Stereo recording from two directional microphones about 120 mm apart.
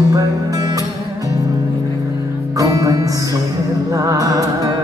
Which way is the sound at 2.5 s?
30° right (ahead or behind).